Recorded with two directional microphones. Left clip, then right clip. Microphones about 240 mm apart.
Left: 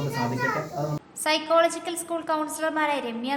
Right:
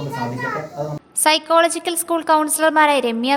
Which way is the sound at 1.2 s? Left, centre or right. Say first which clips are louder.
Right 7 dB; right.